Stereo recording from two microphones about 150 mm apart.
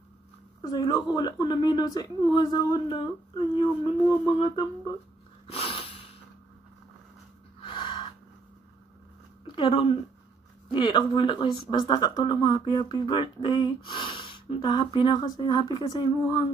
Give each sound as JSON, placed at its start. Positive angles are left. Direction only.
{"t": 0.6, "sound": "a woman's voice", "side_deg": 25}
{"t": 5.5, "sound": "a sound", "side_deg": 40}
{"t": 7.6, "sound": "gasp", "side_deg": 35}
{"t": 9.5, "sound": "a woman's voice", "side_deg": 40}